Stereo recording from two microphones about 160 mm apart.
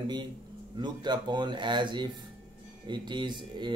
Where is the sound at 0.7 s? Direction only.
30° right (ahead or behind).